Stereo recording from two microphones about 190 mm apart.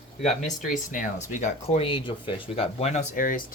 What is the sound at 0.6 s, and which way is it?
Speech, 40° left (ahead or behind).